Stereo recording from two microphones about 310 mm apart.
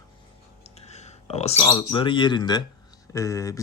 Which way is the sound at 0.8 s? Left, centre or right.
Left.